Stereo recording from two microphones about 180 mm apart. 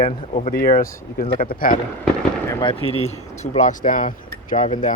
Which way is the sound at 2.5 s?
20° left (ahead or behind).